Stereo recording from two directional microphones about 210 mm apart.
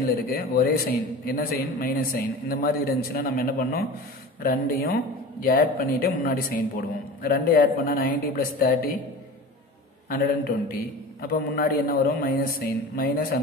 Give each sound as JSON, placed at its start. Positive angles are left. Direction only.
{"t": 0.0, "sound": "a man's voice", "side_deg": 45}
{"t": 10.0, "sound": "a man's voice", "side_deg": 45}